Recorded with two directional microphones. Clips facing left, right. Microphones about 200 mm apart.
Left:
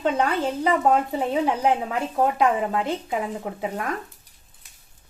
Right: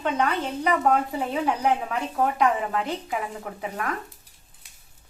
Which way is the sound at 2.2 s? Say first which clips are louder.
Left 2 dB; 25° left (ahead or behind).